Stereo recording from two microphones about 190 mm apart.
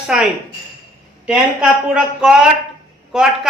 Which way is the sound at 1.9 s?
Centre (ahead or behind).